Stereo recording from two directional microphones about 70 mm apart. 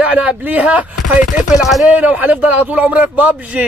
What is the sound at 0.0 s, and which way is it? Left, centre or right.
Speech, centre.